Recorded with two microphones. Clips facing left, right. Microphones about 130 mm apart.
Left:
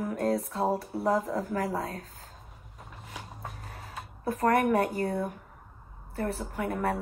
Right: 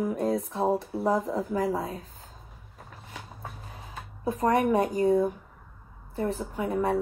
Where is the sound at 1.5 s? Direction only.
15° right (ahead or behind).